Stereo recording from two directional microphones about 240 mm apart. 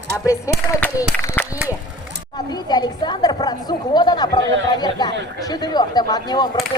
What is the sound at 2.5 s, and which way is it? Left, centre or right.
A woman's voice, centre.